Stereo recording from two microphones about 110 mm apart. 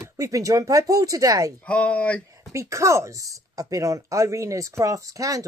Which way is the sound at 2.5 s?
25° right (ahead or behind).